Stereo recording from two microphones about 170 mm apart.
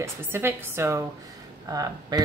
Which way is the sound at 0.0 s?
15° right (ahead or behind).